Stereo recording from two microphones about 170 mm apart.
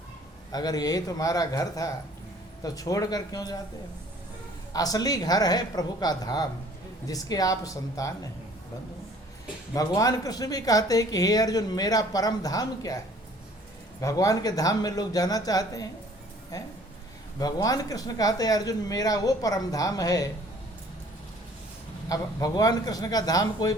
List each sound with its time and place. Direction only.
0.5 s speech: 20° left (ahead or behind)
4.7 s speech: 20° left (ahead or behind)
9.7 s speech: 20° left (ahead or behind)
14.0 s speech: 20° left (ahead or behind)
17.4 s speech: 20° left (ahead or behind)
22.1 s speech: 20° left (ahead or behind)